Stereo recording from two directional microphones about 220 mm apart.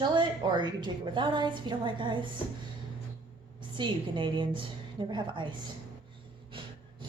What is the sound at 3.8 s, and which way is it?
A woman's voice, 20° right (ahead or behind).